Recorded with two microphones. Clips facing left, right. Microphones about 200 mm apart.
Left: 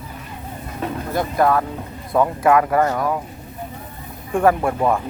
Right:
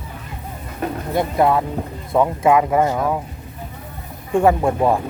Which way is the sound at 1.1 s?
20° right (ahead or behind).